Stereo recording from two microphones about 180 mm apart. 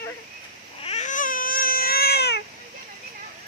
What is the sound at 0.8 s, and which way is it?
Baby cry, 35° left (ahead or behind).